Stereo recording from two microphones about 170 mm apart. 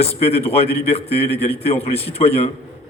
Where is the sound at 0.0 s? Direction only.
35° left (ahead or behind).